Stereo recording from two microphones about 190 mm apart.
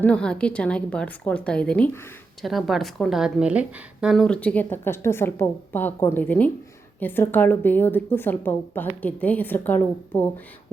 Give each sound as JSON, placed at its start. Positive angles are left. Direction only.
{"t": 0.0, "sound": "a woman's voice", "side_deg": 5}